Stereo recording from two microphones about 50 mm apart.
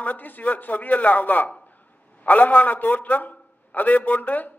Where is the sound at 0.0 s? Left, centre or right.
Left.